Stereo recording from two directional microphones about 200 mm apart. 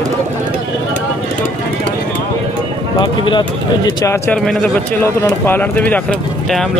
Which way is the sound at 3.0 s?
25° left (ahead or behind).